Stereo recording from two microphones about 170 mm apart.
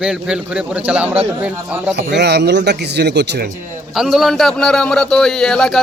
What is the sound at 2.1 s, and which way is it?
A man's voice, 75° right (ahead or behind).